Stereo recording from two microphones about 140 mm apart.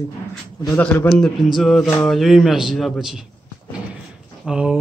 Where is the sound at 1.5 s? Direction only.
Centre (ahead or behind).